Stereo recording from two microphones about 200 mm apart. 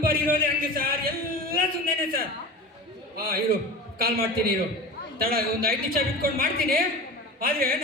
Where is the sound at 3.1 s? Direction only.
45° right (ahead or behind).